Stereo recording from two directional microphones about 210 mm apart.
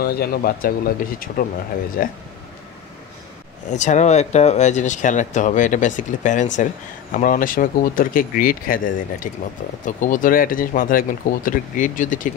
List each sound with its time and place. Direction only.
0.0 s speech: 45° left (ahead or behind)
3.6 s speech: 35° left (ahead or behind)